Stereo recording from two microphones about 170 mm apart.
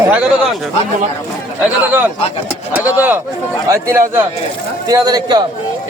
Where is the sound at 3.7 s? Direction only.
15° right (ahead or behind).